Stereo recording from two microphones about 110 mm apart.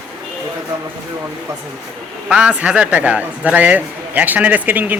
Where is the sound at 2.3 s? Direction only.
10° right (ahead or behind).